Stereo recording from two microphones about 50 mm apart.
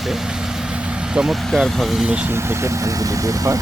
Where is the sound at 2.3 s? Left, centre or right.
Right.